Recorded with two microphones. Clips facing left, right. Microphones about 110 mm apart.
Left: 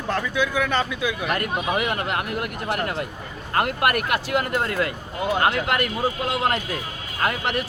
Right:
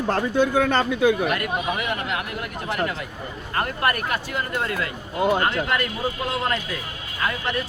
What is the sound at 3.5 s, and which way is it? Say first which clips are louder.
Speech: left 3 dB; 65° left (ahead or behind).